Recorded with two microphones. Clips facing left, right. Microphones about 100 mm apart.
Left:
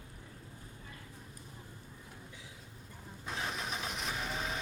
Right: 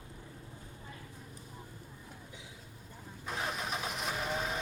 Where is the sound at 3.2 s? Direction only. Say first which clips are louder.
Right 2 dB; centre (ahead or behind).